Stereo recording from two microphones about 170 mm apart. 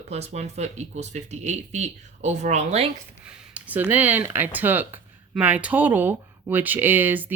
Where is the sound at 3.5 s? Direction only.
10° right (ahead or behind).